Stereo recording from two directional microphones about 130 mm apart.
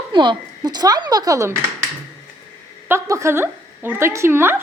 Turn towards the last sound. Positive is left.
turn(degrees=-20)  # may be behind; listen again after turning